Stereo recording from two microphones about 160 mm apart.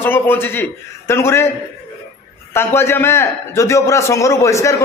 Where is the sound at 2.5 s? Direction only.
15° left (ahead or behind).